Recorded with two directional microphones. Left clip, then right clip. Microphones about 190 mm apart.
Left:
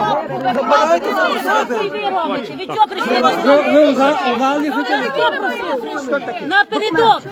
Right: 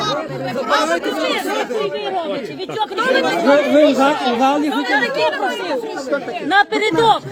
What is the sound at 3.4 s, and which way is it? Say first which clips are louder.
Speech: left 1 dB; 35° right (ahead or behind).